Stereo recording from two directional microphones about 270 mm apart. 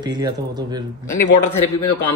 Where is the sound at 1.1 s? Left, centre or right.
Left.